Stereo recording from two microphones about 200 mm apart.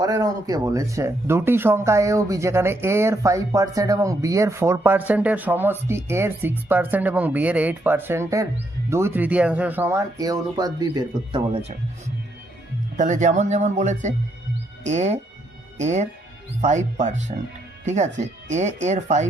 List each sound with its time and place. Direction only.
0.0 s speech: 20° right (ahead or behind)
13.0 s speech: 40° right (ahead or behind)